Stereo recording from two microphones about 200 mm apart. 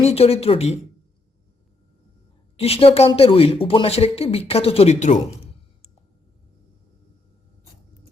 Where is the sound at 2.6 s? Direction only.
30° left (ahead or behind).